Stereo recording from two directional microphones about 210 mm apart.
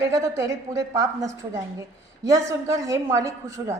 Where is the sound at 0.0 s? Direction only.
15° right (ahead or behind).